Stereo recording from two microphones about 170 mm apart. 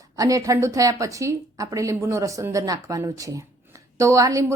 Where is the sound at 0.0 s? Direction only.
20° right (ahead or behind).